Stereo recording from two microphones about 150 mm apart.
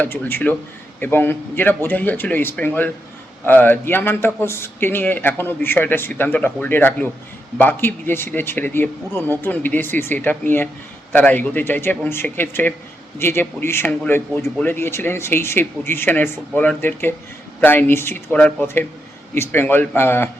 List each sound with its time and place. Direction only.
0.0 s a man's voice: 15° left (ahead or behind)